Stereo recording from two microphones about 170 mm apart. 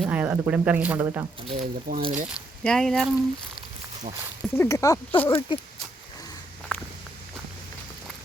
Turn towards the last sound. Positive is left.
turn(degrees=10)  # may be behind; listen again after turning